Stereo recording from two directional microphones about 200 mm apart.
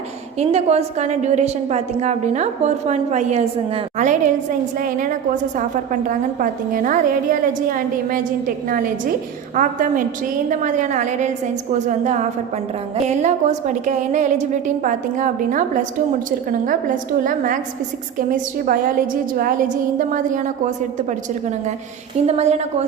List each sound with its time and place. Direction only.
0.3 s a woman's voice: 30° right (ahead or behind)
22.3 s a woman's voice: 35° right (ahead or behind)